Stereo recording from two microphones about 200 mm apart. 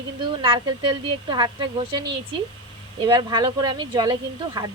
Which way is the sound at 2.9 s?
20° right (ahead or behind).